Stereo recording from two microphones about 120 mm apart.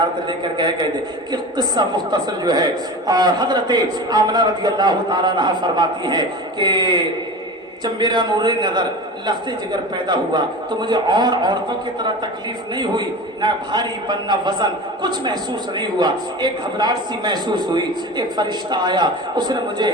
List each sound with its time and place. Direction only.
0.3 s a man's voice: 40° right (ahead or behind)
10.1 s a man's voice: 40° right (ahead or behind)